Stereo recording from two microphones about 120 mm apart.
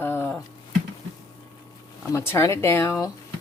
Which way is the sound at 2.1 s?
20° left (ahead or behind).